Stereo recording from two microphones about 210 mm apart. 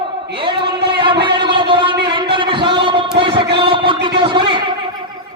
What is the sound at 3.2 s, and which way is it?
Music, 25° right (ahead or behind).